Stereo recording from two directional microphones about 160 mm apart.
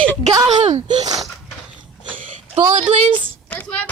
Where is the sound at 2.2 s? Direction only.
50° right (ahead or behind).